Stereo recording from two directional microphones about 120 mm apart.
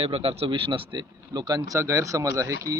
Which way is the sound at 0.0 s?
55° right (ahead or behind).